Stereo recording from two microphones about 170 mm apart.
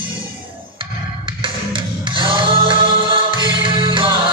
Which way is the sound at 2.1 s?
30° right (ahead or behind).